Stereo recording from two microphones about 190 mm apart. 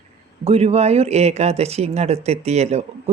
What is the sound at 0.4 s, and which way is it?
Speech, 35° right (ahead or behind).